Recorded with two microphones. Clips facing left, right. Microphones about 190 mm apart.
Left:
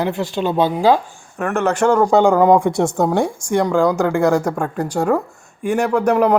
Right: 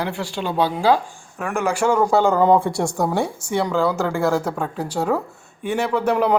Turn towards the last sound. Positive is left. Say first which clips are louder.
# left 4 dB
turn(degrees=10)  # may be behind; listen again after turning